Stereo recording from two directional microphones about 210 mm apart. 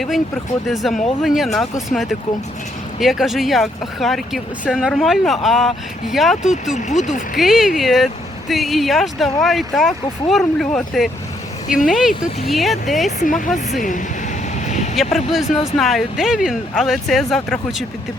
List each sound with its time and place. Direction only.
0.7 s speech: centre (ahead or behind)
3.0 s speech: centre (ahead or behind)
6.7 s speech: 35° left (ahead or behind)
7.3 s speech: centre (ahead or behind)
13.1 s speech: 35° left (ahead or behind)
14.9 s speech: centre (ahead or behind)